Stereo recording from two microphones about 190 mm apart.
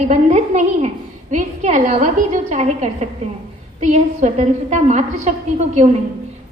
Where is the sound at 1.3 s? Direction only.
40° right (ahead or behind).